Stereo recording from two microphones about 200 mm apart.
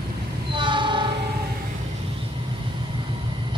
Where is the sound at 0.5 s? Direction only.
25° right (ahead or behind).